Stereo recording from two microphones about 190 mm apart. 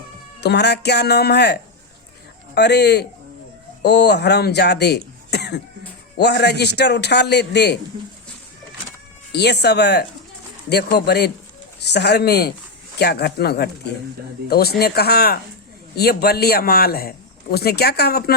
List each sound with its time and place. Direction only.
0.4 s a man's voice: 60° left (ahead or behind)
2.6 s a man's voice: 60° left (ahead or behind)
9.3 s a man's voice: 60° left (ahead or behind)